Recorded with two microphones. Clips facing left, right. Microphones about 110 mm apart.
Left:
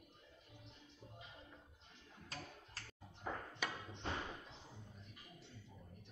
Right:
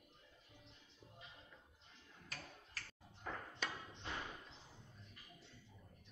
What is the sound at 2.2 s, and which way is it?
Finger snapping, 25° left (ahead or behind).